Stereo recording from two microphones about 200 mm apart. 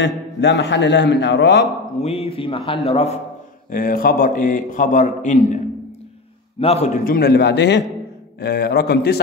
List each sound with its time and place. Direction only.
0.0 s a man's voice: 60° left (ahead or behind)
2.0 s a man's voice: 30° left (ahead or behind)
3.7 s a man's voice: 45° left (ahead or behind)
6.6 s a man's voice: 30° left (ahead or behind)
7.1 s a man's voice: 55° left (ahead or behind)